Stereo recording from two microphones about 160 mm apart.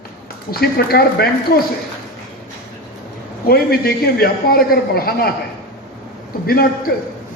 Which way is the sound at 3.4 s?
70° left (ahead or behind).